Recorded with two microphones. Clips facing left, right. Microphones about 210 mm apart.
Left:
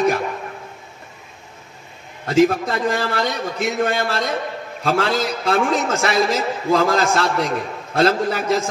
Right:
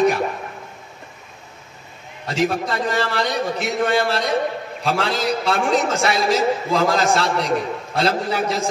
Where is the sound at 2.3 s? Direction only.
50° left (ahead or behind).